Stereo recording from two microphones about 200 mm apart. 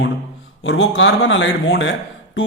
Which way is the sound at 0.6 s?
70° left (ahead or behind).